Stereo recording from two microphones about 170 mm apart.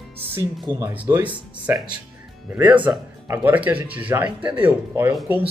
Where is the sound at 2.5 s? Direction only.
10° right (ahead or behind).